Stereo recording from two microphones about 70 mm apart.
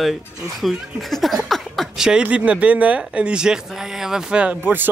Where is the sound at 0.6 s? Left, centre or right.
Centre.